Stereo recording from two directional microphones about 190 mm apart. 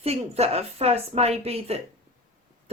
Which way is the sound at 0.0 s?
35° right (ahead or behind).